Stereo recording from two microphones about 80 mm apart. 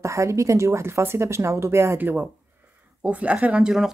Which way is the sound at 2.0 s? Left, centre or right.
Right.